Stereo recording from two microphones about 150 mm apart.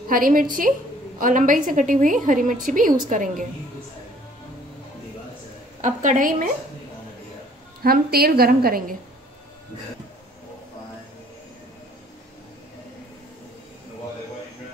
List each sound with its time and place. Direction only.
0.1 s a woman's voice: 70° right (ahead or behind)
5.8 s a woman's voice: 55° right (ahead or behind)
7.8 s a woman's voice: 90° right